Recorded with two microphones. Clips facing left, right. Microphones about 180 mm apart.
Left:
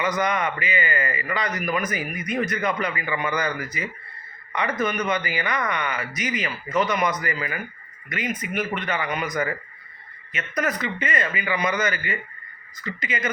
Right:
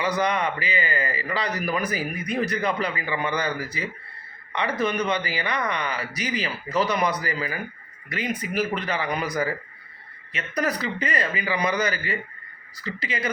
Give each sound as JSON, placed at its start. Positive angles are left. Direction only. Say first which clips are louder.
{"t": 0.0, "sound": "speech", "louder": "even", "side_deg": -30}